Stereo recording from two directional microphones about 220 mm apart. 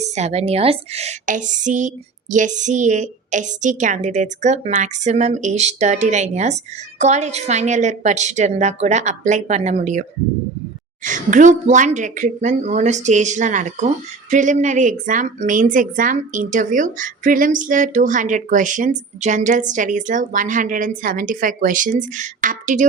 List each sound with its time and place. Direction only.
0.0 s speech: 30° right (ahead or behind)